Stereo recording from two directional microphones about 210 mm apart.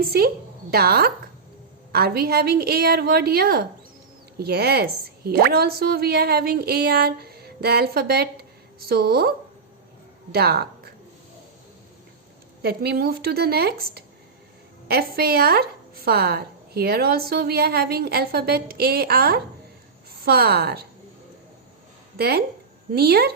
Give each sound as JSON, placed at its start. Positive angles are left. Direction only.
{"t": 0.0, "sound": "a woman's voice", "side_deg": -45}
{"t": 10.3, "sound": "a woman's voice", "side_deg": -50}
{"t": 12.6, "sound": "a woman's voice", "side_deg": -50}
{"t": 22.2, "sound": "a woman's voice", "side_deg": -50}